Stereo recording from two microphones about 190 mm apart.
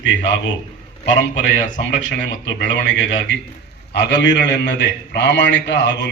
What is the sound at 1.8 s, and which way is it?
A man's voice, 75° left (ahead or behind).